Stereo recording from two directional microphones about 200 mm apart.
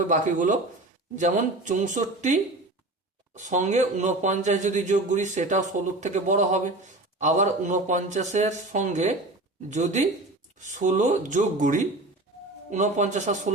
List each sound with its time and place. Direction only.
0.1 s speech: 40° right (ahead or behind)